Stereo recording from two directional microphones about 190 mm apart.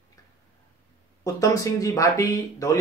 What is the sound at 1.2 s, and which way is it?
Speech, 15° left (ahead or behind).